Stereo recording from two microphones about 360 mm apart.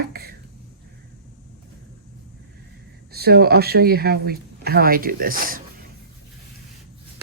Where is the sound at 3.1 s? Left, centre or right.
Right.